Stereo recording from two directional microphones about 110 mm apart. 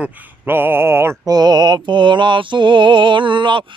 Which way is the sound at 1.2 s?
35° right (ahead or behind).